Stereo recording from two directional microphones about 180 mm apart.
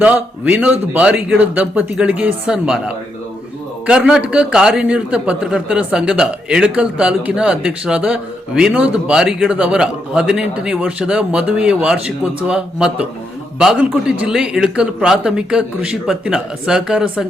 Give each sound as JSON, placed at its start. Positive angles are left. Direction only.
{"t": 0.0, "sound": "a man's voice", "side_deg": -10}